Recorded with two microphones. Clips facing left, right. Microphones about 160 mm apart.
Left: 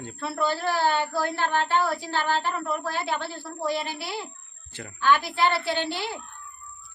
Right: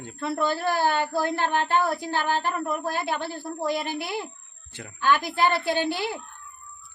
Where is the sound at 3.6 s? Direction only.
50° right (ahead or behind).